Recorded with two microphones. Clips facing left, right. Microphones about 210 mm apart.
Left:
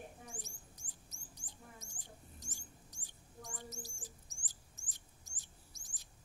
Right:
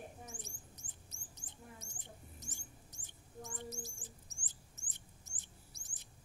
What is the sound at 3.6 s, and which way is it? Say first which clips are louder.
Bird: right 3 dB; 20° right (ahead or behind).